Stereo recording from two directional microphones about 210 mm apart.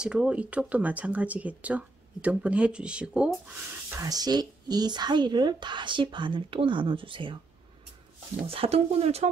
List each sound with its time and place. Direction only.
0.0 s speech: 5° right (ahead or behind); by 7.3 s 25° right (ahead or behind)
8.5 s speech: 30° right (ahead or behind)